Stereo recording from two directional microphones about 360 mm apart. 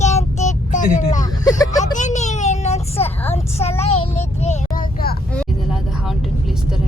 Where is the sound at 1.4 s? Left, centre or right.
Centre.